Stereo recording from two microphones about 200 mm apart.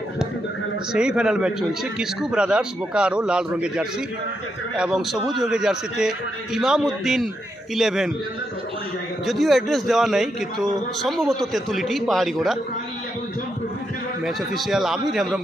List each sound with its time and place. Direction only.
0.9 s speech: 5° right (ahead or behind)
9.2 s speech: centre (ahead or behind)
14.2 s speech: centre (ahead or behind)